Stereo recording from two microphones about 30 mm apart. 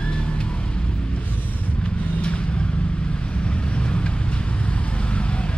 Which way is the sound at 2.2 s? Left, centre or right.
Left.